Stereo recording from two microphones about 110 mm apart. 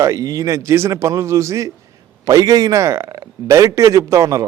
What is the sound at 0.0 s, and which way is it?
A man's voice, 30° right (ahead or behind).